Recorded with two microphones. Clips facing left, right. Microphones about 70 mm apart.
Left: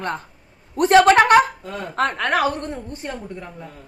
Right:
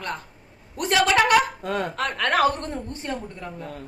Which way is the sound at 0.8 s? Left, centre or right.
Left.